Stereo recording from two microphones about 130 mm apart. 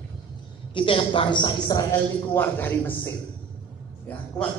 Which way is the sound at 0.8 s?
45° left (ahead or behind).